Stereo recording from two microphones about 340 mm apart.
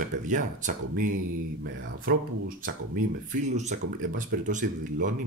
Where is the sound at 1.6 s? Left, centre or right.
Right.